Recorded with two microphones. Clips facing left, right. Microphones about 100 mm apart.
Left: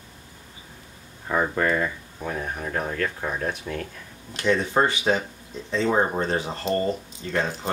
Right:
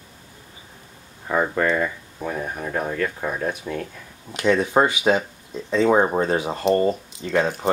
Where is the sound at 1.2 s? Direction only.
Centre (ahead or behind).